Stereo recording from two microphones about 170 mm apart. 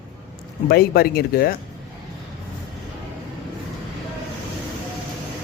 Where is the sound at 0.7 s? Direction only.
65° left (ahead or behind).